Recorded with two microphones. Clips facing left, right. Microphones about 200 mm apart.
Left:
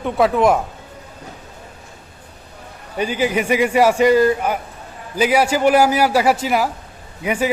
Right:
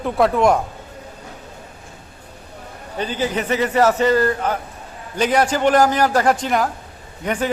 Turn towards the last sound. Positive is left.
turn(degrees=10)  # may be behind; listen again after turning